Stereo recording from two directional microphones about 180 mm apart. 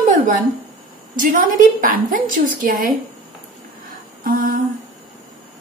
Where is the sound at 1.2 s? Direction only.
50° right (ahead or behind).